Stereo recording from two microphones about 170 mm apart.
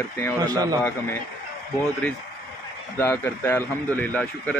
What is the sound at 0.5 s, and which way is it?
Speech, 20° right (ahead or behind).